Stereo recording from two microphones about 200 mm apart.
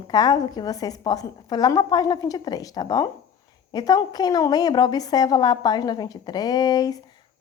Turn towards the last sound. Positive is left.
turn(degrees=20)  # may be behind; listen again after turning